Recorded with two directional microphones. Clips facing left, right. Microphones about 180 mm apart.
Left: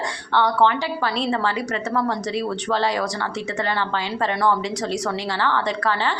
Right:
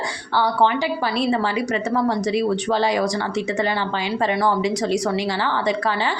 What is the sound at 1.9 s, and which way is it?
A woman's voice, 10° right (ahead or behind).